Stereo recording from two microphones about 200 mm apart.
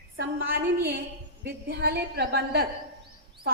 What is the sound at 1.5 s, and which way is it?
A woman's voice, 50° right (ahead or behind).